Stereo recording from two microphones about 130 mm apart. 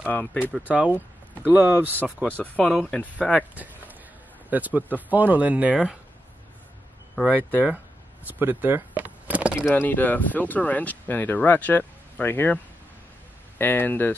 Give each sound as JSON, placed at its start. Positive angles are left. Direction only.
{"t": 0.0, "sound": "speech", "side_deg": 10}
{"t": 0.5, "sound": "speech", "side_deg": -10}
{"t": 2.3, "sound": "speech", "side_deg": 10}
{"t": 2.7, "sound": "speech", "side_deg": 0}
{"t": 3.3, "sound": "speech", "side_deg": -10}
{"t": 7.2, "sound": "speech", "side_deg": -10}
{"t": 9.8, "sound": "speech", "side_deg": 15}
{"t": 13.6, "sound": "speech", "side_deg": 15}